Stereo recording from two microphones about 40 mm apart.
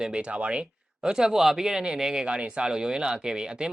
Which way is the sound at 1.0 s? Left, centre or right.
Centre.